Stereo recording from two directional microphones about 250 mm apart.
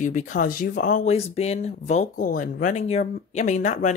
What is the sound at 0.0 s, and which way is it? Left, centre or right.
Speech, left.